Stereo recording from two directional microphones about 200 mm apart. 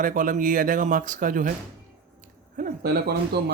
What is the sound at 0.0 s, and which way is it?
Speech, 40° right (ahead or behind).